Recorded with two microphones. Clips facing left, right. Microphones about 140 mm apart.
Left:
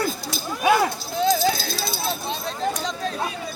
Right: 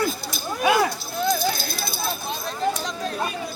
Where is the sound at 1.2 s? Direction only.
90° left.